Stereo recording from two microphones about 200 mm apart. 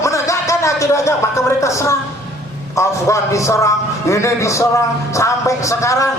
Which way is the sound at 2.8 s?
15° left (ahead or behind).